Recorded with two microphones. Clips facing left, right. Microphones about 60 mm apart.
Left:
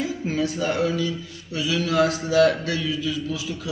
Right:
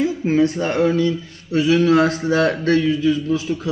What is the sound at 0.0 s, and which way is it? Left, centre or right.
A man's voice, right.